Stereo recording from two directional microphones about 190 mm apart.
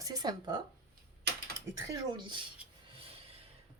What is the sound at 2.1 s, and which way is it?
Speech, 25° right (ahead or behind).